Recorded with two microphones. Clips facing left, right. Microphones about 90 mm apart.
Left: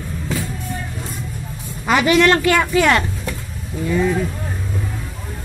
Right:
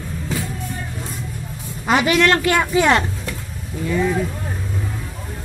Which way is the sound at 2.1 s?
5° left (ahead or behind).